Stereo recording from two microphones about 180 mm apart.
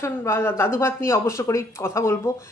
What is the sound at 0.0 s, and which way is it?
Speech, 15° left (ahead or behind).